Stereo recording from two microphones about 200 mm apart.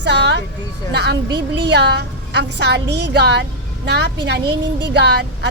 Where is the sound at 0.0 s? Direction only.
60° right (ahead or behind).